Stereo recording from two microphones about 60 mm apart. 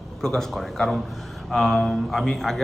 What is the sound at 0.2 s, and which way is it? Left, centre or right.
A man's voice, centre.